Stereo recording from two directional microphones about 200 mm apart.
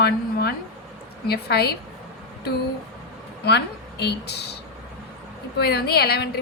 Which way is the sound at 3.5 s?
55° left (ahead or behind).